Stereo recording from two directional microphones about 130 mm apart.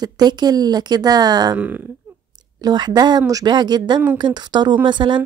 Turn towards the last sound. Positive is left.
turn(degrees=-35)  # may be behind; listen again after turning